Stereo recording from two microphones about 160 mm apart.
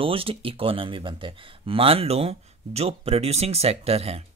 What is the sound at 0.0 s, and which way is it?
Speech, 35° right (ahead or behind).